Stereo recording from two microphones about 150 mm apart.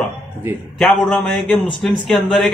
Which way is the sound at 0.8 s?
Centre (ahead or behind).